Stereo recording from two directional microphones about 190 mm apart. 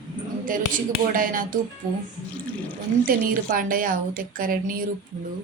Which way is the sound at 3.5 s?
45° right (ahead or behind).